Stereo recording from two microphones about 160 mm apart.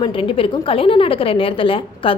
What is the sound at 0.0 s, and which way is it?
A woman's voice, 35° left (ahead or behind).